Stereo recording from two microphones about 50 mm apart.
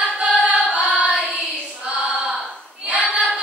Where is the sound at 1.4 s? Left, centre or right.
Right.